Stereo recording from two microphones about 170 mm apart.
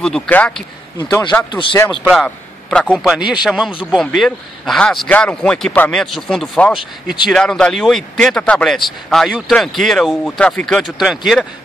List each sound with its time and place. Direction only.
0.0 s a man's voice: 5° left (ahead or behind)
1.5 s a man's voice: 30° left (ahead or behind)
1.9 s a man's voice: centre (ahead or behind)